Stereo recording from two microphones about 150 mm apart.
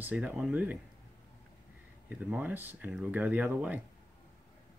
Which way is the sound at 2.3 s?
10° right (ahead or behind).